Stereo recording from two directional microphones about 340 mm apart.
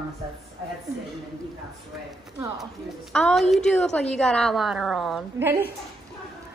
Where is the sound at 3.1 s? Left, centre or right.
Centre.